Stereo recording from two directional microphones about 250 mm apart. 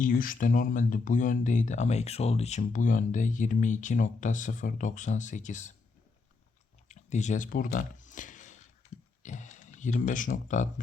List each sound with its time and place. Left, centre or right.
0.0 s speech: left
6.8 s a sound: left
9.2 s speech: left